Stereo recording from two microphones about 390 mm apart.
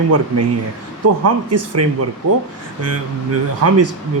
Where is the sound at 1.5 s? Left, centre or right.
Right.